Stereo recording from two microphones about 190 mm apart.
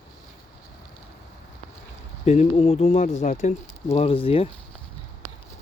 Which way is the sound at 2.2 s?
35° left (ahead or behind).